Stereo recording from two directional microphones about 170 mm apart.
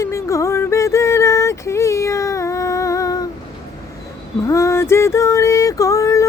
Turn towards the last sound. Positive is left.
turn(degrees=15)  # may be behind; listen again after turning